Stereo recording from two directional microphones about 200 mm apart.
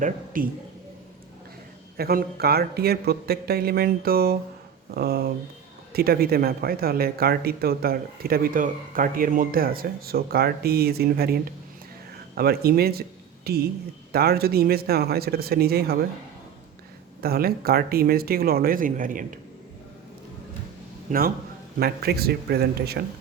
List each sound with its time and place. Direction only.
0.4 s speech: 45° right (ahead or behind)
2.0 s speech: 50° right (ahead or behind)
17.2 s speech: 50° right (ahead or behind)
21.1 s speech: 45° right (ahead or behind)